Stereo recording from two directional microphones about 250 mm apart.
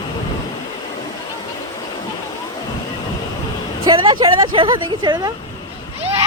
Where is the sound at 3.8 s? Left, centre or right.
Centre.